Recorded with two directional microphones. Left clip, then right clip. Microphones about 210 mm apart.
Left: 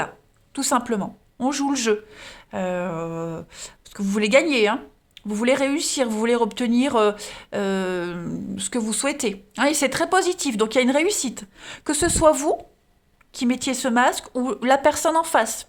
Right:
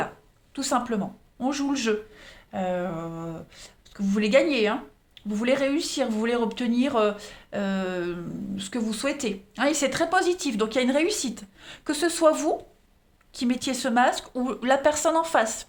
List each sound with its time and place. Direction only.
0.5 s speech: 40° left (ahead or behind)